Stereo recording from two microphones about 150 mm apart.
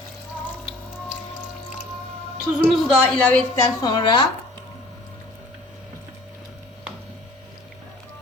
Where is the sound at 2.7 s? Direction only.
10° left (ahead or behind).